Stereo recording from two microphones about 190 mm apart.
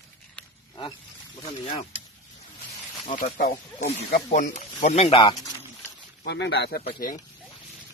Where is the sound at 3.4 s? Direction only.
60° left (ahead or behind).